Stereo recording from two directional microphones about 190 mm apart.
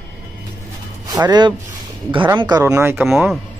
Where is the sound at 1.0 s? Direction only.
20° right (ahead or behind); by 3.3 s 5° right (ahead or behind).